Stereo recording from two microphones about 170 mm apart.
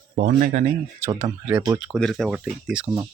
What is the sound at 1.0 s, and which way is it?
Speech, 20° right (ahead or behind).